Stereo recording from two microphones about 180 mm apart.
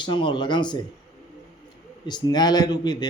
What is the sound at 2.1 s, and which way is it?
A man's voice, 25° left (ahead or behind).